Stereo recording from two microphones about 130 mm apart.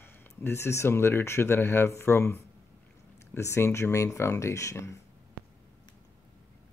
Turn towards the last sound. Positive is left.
turn(degrees=25)  # may be behind; listen again after turning